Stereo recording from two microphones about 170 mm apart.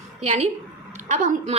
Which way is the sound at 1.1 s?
45° right (ahead or behind).